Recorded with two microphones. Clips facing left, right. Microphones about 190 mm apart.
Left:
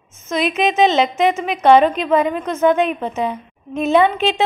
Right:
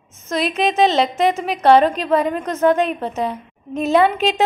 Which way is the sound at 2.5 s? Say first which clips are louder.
Left 1 dB; 35° right (ahead or behind).